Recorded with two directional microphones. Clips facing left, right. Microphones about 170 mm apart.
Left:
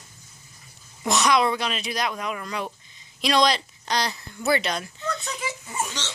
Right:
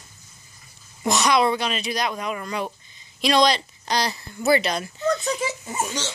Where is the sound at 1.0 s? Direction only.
Centre (ahead or behind).